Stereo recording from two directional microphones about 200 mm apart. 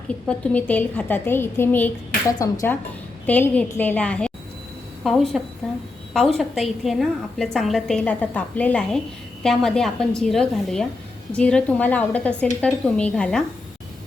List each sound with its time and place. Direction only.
0.1 s a woman's voice: 5° left (ahead or behind)